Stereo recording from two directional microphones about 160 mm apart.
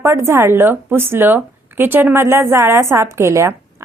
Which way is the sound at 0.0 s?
15° right (ahead or behind).